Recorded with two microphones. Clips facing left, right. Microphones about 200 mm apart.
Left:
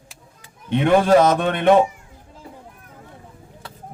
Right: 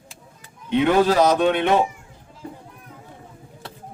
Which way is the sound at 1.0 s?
50° left (ahead or behind).